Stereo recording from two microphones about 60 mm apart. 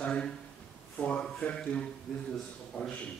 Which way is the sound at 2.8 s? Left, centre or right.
Left.